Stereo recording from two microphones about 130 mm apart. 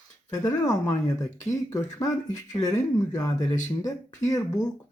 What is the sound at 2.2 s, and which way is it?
Speech, 70° left (ahead or behind).